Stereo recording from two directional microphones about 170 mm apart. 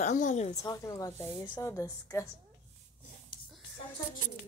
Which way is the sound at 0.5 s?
20° left (ahead or behind).